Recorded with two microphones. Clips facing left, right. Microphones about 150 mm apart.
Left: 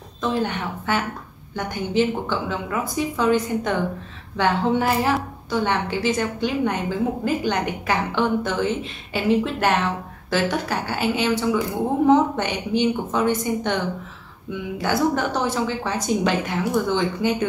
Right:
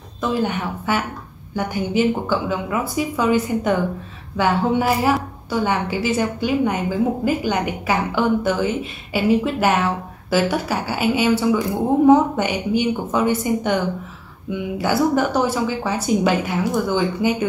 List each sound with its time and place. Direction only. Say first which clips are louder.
0.2 s speech: right 2 dB; 10° right (ahead or behind)